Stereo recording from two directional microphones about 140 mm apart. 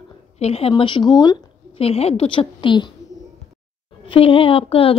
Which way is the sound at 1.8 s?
45° left (ahead or behind).